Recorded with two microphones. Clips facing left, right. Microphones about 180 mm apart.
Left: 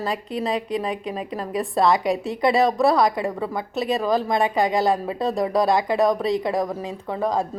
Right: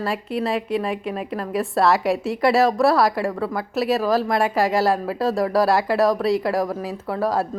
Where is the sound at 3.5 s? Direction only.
Centre (ahead or behind).